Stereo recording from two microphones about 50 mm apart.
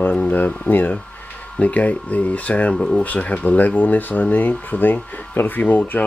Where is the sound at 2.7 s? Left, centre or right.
Centre.